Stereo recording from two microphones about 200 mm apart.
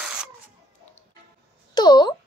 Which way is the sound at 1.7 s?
20° left (ahead or behind).